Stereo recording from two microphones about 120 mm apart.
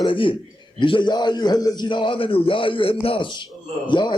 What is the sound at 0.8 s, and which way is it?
A man's voice, 40° left (ahead or behind).